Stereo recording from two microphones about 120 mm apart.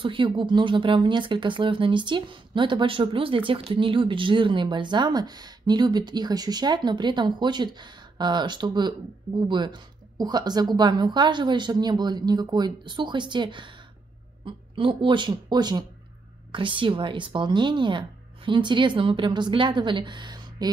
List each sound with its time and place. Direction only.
0.0 s speech: 45° right (ahead or behind)